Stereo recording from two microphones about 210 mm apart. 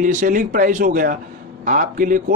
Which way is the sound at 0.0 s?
35° right (ahead or behind).